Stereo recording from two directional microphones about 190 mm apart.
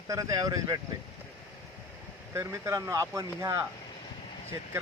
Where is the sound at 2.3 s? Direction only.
15° right (ahead or behind).